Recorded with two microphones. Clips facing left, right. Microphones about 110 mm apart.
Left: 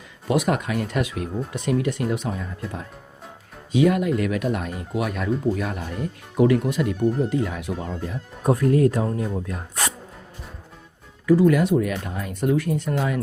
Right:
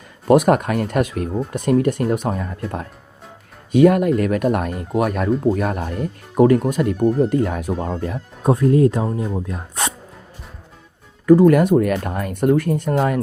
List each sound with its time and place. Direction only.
0.3 s speech: 50° right (ahead or behind)
8.4 s speech: 25° right (ahead or behind)
11.3 s speech: 50° right (ahead or behind)